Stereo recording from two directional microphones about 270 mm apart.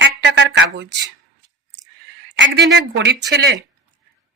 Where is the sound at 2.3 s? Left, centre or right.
Right.